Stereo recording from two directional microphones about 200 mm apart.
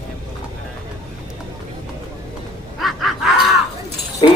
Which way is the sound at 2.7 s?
Centre (ahead or behind).